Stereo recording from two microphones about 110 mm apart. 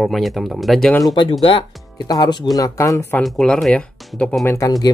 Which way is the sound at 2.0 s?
35° left (ahead or behind).